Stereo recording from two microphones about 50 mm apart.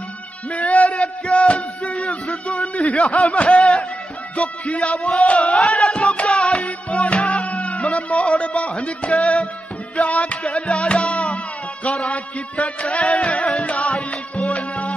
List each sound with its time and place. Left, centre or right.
0.5 s music: left